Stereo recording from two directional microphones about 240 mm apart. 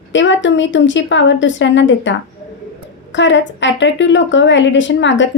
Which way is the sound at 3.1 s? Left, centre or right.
Left.